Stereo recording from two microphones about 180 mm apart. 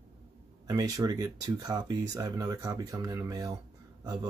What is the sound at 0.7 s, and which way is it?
Speech, 20° right (ahead or behind).